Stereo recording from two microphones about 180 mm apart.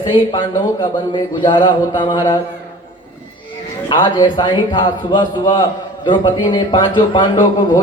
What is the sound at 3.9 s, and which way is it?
A man's voice, 25° left (ahead or behind).